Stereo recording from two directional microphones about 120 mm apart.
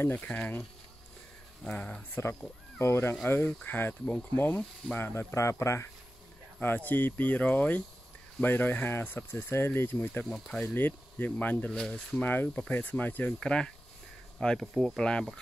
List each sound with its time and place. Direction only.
0.0 s speech: 15° left (ahead or behind)
1.6 s speech: 10° left (ahead or behind)
10.2 s speech: 5° left (ahead or behind)